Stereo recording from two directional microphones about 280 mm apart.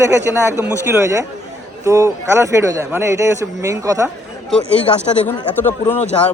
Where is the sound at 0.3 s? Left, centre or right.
Centre.